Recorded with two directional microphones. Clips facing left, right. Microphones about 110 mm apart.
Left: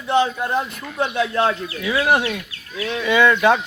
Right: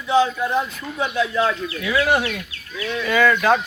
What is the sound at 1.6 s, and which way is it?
A man's voice, 30° left (ahead or behind).